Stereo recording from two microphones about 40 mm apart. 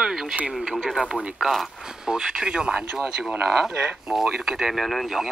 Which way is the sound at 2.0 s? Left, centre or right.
Centre.